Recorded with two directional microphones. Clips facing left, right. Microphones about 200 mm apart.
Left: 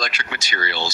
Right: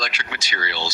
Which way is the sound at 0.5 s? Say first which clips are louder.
Left 3 dB; 50° left (ahead or behind).